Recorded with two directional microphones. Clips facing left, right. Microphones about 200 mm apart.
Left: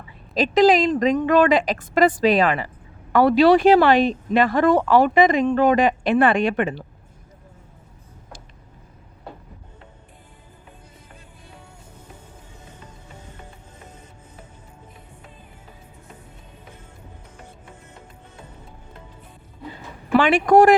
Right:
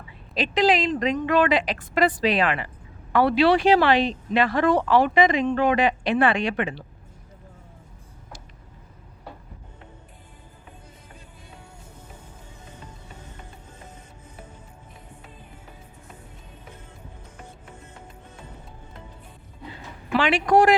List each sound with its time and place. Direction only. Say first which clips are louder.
0.3 s speech: left 5 dB; 40° left (ahead or behind)
20.1 s a man's voice: left 5 dB; 50° left (ahead or behind)